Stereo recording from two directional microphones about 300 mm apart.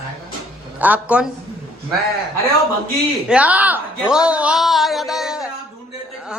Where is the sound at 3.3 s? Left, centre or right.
Centre.